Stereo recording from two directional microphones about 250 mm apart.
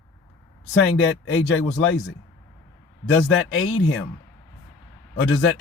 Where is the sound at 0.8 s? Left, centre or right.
Left.